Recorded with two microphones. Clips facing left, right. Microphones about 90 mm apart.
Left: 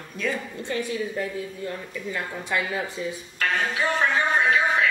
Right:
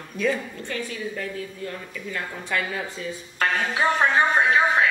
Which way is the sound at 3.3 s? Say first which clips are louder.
Right 2 dB; 35° right (ahead or behind).